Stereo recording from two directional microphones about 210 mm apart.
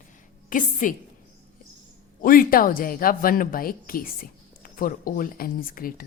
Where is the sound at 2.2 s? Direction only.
40° left (ahead or behind).